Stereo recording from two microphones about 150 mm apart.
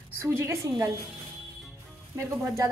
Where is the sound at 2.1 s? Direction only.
20° right (ahead or behind).